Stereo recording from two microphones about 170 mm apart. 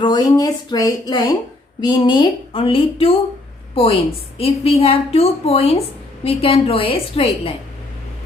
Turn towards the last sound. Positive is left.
turn(degrees=35)  # may be behind; listen again after turning